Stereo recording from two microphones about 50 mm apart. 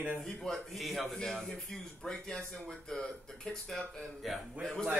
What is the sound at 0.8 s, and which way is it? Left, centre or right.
Speech, centre.